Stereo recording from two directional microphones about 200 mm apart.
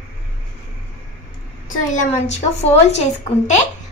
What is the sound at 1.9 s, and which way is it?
Speech, 35° left (ahead or behind).